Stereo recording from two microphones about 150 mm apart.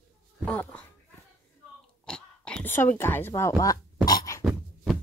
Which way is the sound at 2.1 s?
5° left (ahead or behind).